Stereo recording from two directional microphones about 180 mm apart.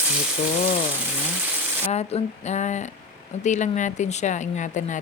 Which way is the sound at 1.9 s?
35° left (ahead or behind).